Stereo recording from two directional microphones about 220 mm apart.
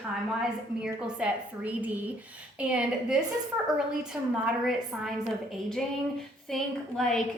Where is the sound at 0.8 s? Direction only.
5° right (ahead or behind).